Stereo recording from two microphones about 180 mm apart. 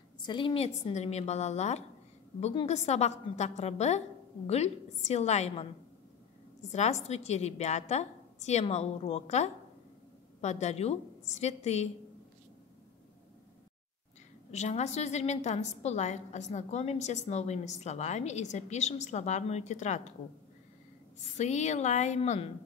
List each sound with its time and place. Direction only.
0.2 s a woman's voice: 25° left (ahead or behind)
6.7 s a woman's voice: 40° left (ahead or behind)
14.5 s a woman's voice: 40° left (ahead or behind)
21.2 s a woman's voice: 40° left (ahead or behind)